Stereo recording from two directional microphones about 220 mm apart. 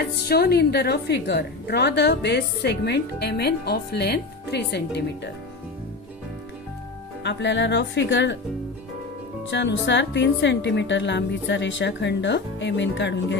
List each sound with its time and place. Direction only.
0.0 s a woman's voice: 45° left (ahead or behind)
7.3 s a woman's voice: 55° left (ahead or behind)
9.5 s a woman's voice: 50° left (ahead or behind)